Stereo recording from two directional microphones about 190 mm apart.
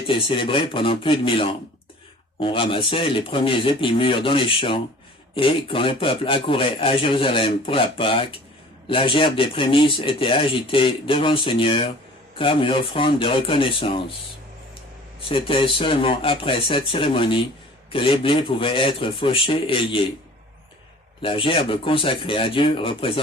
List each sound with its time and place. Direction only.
0.1 s speech: 25° left (ahead or behind)
15.2 s speech: 25° left (ahead or behind)
21.2 s speech: 25° left (ahead or behind)